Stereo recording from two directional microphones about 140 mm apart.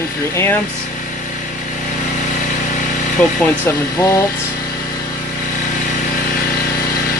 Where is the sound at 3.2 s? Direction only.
10° left (ahead or behind).